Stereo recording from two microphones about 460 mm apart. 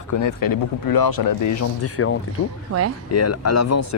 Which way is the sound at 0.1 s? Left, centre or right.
Left.